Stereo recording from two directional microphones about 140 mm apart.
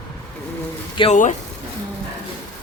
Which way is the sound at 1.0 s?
35° left (ahead or behind).